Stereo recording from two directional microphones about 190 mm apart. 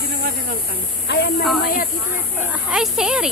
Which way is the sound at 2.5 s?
5° right (ahead or behind).